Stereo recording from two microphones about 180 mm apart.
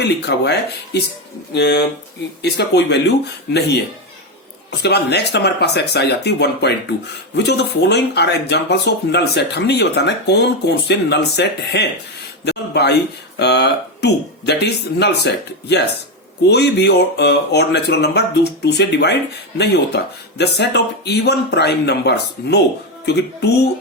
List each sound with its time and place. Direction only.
0.0 s speech: 65° left (ahead or behind)
1.5 s speech: 75° left (ahead or behind)
4.8 s speech: 65° left (ahead or behind)
16.5 s speech: 65° left (ahead or behind)